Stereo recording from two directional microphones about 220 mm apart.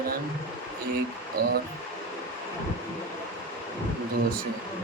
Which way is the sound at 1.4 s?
40° right (ahead or behind).